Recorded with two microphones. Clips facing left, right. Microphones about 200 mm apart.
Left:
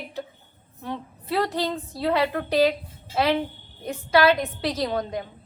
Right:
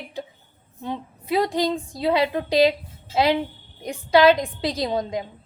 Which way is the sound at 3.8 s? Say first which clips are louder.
Right 3 dB; 15° right (ahead or behind).